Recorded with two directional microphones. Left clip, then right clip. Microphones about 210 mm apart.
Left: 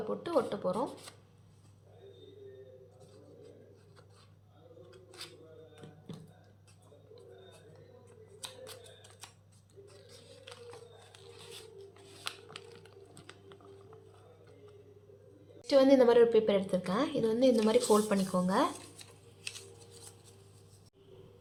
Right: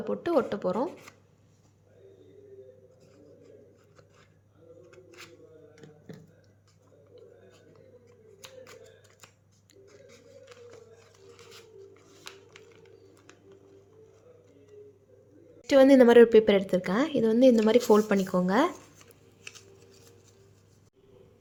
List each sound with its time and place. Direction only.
0.1 s a woman's voice: 30° right (ahead or behind)
9.8 s a sound: 10° left (ahead or behind)
15.6 s a woman's voice: 35° right (ahead or behind)